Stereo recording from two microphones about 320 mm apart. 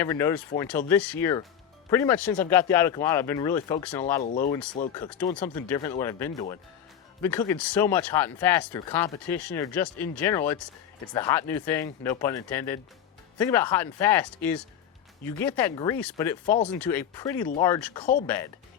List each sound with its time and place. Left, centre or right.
0.0 s speech: centre
4.2 s speech: left
4.9 s speech: centre